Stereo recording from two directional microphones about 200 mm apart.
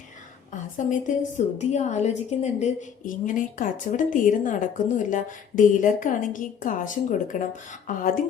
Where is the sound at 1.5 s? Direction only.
35° left (ahead or behind).